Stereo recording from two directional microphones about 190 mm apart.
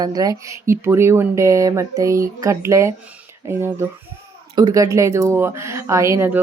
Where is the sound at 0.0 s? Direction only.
20° right (ahead or behind).